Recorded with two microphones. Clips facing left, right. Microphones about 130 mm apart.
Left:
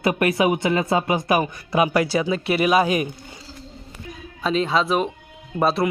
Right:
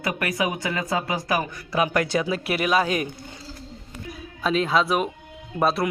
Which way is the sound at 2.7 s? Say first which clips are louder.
Left 3 dB; 10° left (ahead or behind).